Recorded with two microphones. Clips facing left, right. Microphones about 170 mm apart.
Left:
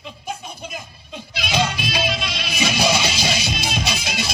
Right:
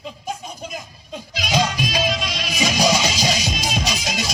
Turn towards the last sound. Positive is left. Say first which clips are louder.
# right 1 dB
turn(degrees=-40)  # may be behind; listen again after turning